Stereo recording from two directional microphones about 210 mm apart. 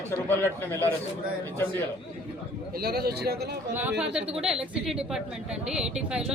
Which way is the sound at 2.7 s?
45° right (ahead or behind).